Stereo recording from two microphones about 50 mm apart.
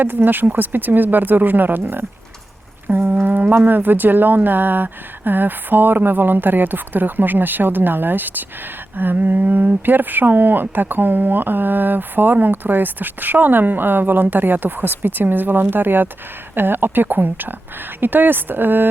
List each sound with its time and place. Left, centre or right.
0.0 s speech: right
3.2 s a sound: right
3.6 s speech: right